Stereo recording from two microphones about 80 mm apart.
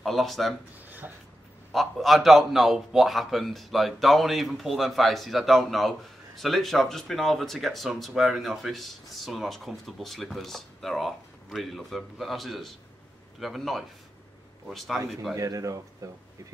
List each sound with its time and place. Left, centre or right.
0.0 s speech: centre
0.8 s a sound: right
1.7 s speech: centre
15.3 s speech: right